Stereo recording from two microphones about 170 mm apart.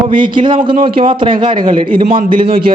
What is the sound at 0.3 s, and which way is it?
A man's voice, 30° right (ahead or behind).